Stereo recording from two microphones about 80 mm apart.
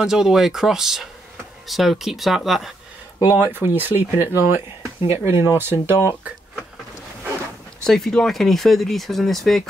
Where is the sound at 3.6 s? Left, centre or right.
Left.